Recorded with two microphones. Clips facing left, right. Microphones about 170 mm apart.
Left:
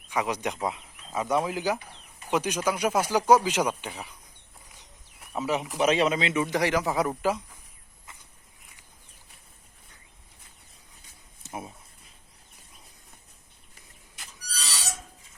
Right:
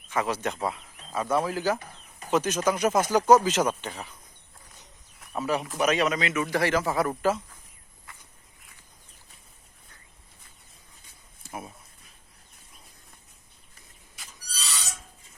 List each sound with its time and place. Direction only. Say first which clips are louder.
0.1 s speech: right 1 dB; 15° left (ahead or behind)
5.2 s speech: even; 15° left (ahead or behind)
5.8 s a man's voice: left 2 dB; 25° left (ahead or behind)
6.4 s speech: right 2 dB; 15° left (ahead or behind)
11.4 s a sound: left 1 dB; 20° left (ahead or behind)